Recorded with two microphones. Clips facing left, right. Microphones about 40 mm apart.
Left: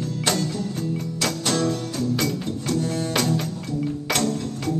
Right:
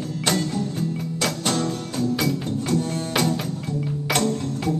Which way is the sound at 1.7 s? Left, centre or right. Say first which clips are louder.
Even; centre.